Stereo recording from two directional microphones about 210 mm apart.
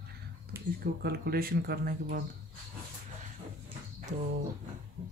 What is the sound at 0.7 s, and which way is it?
Speech, 50° right (ahead or behind).